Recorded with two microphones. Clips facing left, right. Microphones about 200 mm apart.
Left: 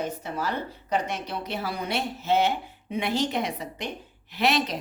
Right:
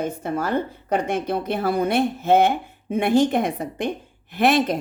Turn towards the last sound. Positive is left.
turn(degrees=-50)  # may be behind; listen again after turning